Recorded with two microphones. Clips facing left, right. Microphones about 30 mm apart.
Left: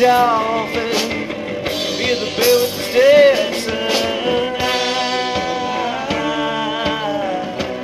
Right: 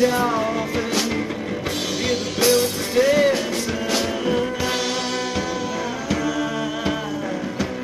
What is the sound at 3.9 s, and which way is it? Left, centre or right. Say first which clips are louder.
Music: left 4 dB; left.